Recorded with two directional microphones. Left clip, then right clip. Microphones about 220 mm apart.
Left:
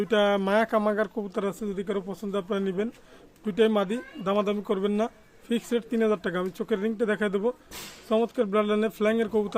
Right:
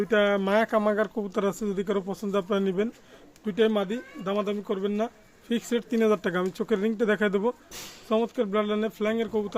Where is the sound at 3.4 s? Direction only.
10° left (ahead or behind).